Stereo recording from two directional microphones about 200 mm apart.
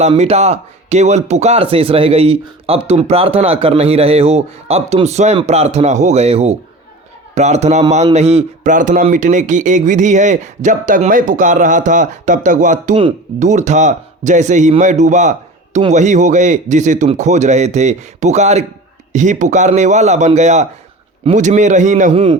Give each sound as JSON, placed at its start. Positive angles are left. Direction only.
{"t": 0.0, "sound": "speech", "side_deg": -30}